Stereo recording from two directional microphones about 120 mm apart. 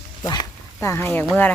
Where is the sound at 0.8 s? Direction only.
20° left (ahead or behind).